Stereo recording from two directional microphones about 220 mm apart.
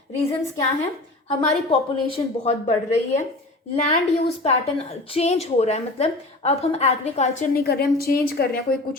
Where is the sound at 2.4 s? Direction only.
30° left (ahead or behind).